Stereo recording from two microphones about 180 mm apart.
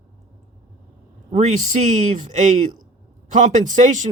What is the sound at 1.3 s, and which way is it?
A man's voice, 40° right (ahead or behind).